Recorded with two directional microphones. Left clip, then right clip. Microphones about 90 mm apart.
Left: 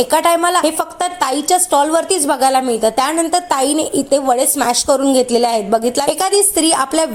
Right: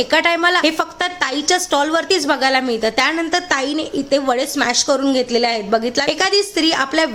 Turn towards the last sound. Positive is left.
turn(degrees=25)  # may be behind; listen again after turning